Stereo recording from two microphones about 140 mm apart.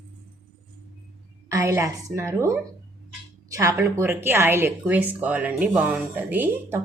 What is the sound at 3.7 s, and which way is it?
Speech, 20° right (ahead or behind).